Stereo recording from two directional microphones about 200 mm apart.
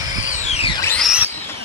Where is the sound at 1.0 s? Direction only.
Centre (ahead or behind).